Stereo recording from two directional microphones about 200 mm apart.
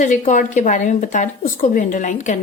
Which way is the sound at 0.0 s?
40° left (ahead or behind).